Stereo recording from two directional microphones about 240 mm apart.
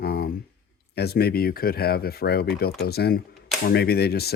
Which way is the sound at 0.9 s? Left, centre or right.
Left.